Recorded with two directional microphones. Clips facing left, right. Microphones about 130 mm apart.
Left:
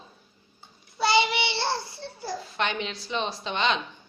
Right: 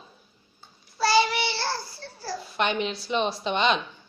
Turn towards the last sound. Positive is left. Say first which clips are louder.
# right 3 dB
turn(degrees=-15)  # may be behind; listen again after turning